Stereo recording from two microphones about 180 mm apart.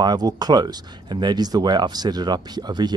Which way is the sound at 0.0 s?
20° right (ahead or behind).